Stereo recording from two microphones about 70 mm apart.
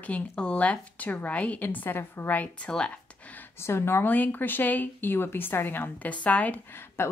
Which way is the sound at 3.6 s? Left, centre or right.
Left.